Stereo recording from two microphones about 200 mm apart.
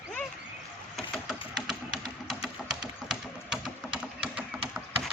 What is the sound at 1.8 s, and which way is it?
Music, 20° right (ahead or behind).